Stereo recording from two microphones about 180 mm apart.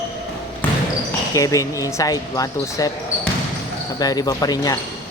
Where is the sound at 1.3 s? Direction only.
20° left (ahead or behind).